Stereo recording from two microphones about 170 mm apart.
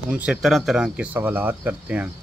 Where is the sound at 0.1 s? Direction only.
5° right (ahead or behind).